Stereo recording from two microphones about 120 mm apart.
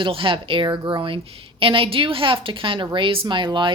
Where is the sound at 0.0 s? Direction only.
45° right (ahead or behind).